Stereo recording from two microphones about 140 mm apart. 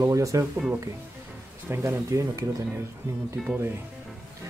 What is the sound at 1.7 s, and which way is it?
Speech, 20° right (ahead or behind).